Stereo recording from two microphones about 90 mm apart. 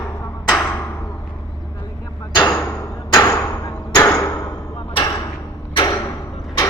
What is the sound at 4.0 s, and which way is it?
Hammer, 30° left (ahead or behind).